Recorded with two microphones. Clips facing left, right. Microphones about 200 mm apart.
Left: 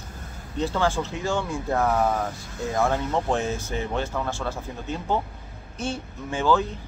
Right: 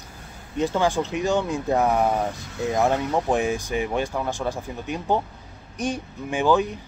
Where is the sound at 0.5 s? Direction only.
15° right (ahead or behind).